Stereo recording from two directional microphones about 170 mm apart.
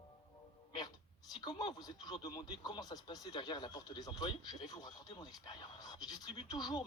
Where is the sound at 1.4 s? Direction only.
25° left (ahead or behind).